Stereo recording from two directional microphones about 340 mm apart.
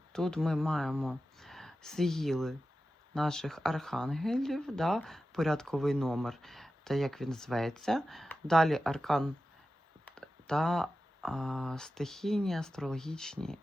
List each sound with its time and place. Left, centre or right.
0.1 s speech: centre